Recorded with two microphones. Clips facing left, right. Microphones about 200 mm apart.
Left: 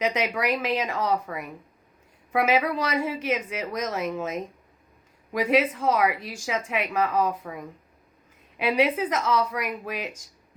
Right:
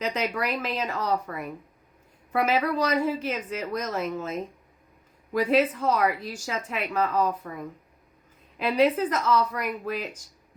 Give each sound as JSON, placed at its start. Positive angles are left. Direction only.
{"t": 0.4, "sound": "a woman's voice", "side_deg": 10}
{"t": 8.5, "sound": "a woman's voice", "side_deg": 10}